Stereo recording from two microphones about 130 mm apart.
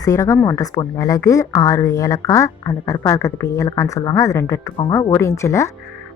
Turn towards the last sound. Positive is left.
turn(degrees=20)  # may be behind; listen again after turning